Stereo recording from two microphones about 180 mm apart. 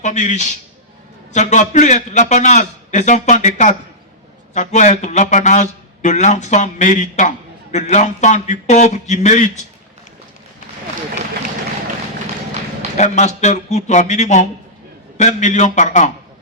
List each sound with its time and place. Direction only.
0.0 s a man's voice: 40° left (ahead or behind)
13.0 s a man's voice: 40° left (ahead or behind)